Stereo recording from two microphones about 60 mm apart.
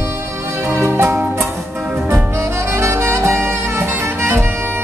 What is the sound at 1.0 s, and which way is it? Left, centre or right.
Music, right.